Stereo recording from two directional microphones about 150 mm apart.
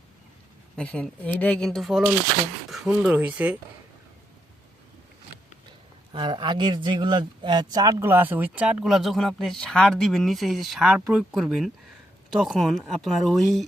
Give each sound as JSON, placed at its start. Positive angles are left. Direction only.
{"t": 0.8, "sound": "speech", "side_deg": 5}
{"t": 6.1, "sound": "speech", "side_deg": -30}